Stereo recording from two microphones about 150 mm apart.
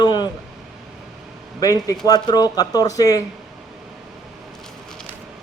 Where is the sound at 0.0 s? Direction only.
30° left (ahead or behind).